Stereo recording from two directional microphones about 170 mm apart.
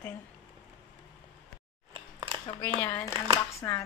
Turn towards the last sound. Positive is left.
turn(degrees=15)  # may be behind; listen again after turning